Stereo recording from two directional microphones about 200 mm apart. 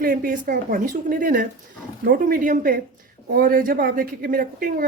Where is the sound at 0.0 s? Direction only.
45° right (ahead or behind).